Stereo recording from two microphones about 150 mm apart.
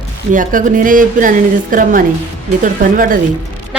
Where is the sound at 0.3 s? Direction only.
60° right (ahead or behind).